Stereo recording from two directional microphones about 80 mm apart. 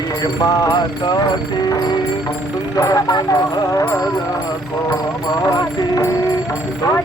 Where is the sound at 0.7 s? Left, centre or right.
Left.